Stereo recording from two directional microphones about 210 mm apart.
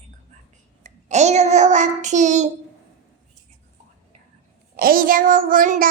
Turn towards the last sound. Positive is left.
turn(degrees=-40)  # may be behind; listen again after turning